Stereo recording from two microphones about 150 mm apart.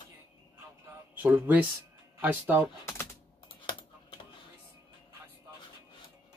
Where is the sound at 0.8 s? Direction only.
10° right (ahead or behind).